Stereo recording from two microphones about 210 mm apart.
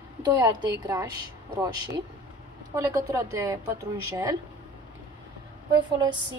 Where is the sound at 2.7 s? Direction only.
15° right (ahead or behind).